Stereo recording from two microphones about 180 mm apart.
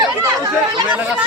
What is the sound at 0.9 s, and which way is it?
Speech, 10° right (ahead or behind).